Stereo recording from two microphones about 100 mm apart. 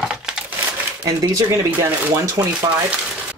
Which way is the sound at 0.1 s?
10° right (ahead or behind).